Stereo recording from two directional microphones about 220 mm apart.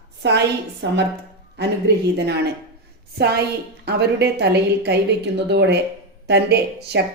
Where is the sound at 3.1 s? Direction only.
50° right (ahead or behind).